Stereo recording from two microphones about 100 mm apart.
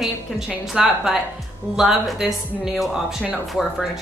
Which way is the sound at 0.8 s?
5° right (ahead or behind).